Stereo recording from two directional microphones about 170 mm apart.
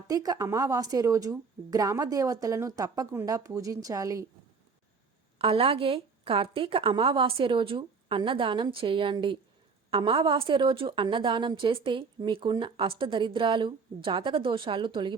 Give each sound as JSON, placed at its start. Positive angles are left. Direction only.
{"t": 0.1, "sound": "a woman's voice", "side_deg": -20}
{"t": 5.4, "sound": "a woman's voice", "side_deg": -35}